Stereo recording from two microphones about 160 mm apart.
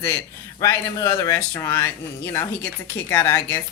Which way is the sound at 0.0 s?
15° left (ahead or behind).